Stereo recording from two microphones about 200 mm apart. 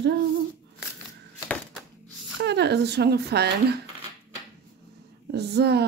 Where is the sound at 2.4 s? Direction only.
60° right (ahead or behind).